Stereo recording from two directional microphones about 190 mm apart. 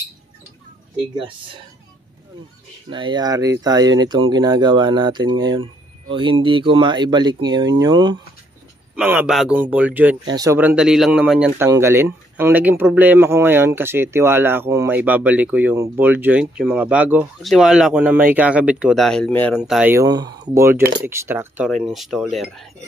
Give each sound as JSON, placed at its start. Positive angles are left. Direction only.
{"t": 1.1, "sound": "speech", "side_deg": -25}
{"t": 2.9, "sound": "speech", "side_deg": -25}
{"t": 8.9, "sound": "speech", "side_deg": -10}
{"t": 10.2, "sound": "speech", "side_deg": -20}
{"t": 19.6, "sound": "speech", "side_deg": -5}
{"t": 20.1, "sound": "speech", "side_deg": -20}
{"t": 21.6, "sound": "speech", "side_deg": 0}